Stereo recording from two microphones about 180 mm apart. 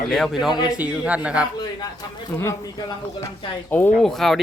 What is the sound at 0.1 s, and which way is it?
Speech, centre (ahead or behind).